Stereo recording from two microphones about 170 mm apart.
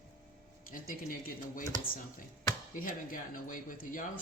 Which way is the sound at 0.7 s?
55° left (ahead or behind).